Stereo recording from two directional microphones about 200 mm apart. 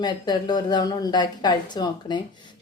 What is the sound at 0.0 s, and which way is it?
A woman's voice, 20° left (ahead or behind).